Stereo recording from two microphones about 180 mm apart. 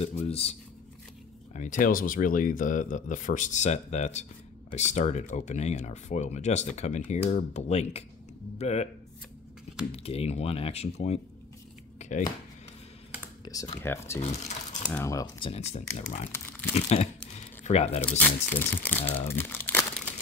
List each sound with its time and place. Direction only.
0.0 s speech: 35° left (ahead or behind)
1.5 s speech: 45° left (ahead or behind)
9.9 s speech: 35° left (ahead or behind)
12.0 s a sound: 40° left (ahead or behind)
13.5 s speech: 20° left (ahead or behind)
14.2 s a sound: 40° left (ahead or behind)
15.0 s speech: 20° left (ahead or behind)
15.5 s speech: 35° left (ahead or behind)
16.3 s speech: 10° left (ahead or behind)
16.7 s speech: 35° left (ahead or behind)
18.1 s speech: 10° left (ahead or behind)
19.2 s crumpling: 10° left (ahead or behind)